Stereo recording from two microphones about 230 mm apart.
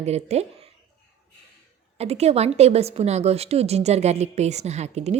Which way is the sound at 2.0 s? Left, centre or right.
Right.